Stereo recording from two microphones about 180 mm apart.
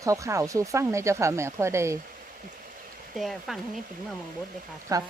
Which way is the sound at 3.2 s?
Centre (ahead or behind).